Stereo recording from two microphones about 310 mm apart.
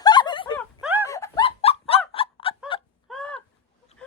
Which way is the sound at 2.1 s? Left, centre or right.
Centre.